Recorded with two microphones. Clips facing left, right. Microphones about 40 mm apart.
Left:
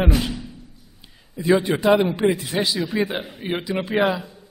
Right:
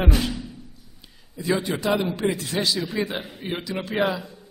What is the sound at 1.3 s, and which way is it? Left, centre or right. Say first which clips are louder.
A man's voice: left 6 dB; left.